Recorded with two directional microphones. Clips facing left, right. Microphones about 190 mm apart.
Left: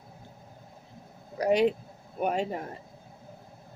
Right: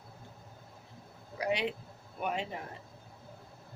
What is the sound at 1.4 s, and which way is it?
Speech, 45° left (ahead or behind).